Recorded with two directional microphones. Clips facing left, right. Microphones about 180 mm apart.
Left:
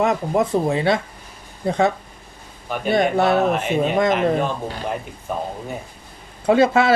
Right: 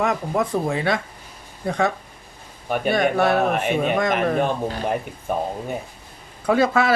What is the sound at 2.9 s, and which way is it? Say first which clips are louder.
Speech: left 2 dB; 25° left (ahead or behind).